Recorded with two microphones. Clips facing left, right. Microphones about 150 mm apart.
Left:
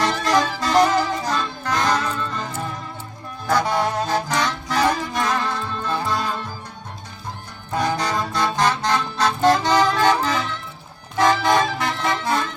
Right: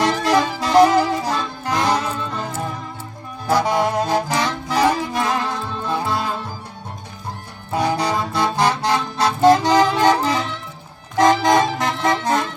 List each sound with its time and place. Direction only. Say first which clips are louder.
0.0 s music: right 2 dB; 10° right (ahead or behind)
7.7 s music: right 2 dB; 10° right (ahead or behind)